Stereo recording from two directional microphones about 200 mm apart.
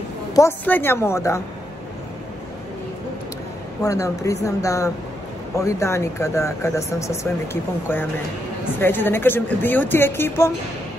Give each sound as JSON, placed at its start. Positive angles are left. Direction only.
{"t": 0.3, "sound": "a woman's voice", "side_deg": 15}
{"t": 3.8, "sound": "a woman's voice", "side_deg": 15}